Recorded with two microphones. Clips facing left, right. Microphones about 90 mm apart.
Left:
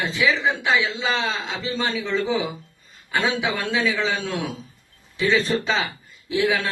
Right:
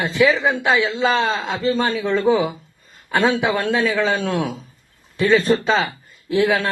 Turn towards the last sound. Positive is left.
turn(degrees=-50)  # may be behind; listen again after turning